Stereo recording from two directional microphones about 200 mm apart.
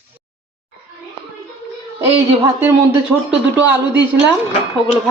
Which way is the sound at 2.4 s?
10° right (ahead or behind).